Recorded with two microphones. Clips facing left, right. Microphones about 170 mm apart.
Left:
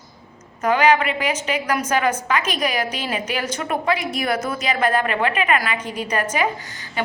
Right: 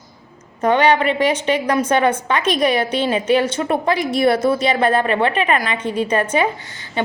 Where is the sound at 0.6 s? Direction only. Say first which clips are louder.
Right 2 dB; 30° right (ahead or behind).